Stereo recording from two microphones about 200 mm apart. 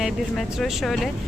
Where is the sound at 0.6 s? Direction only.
Centre (ahead or behind).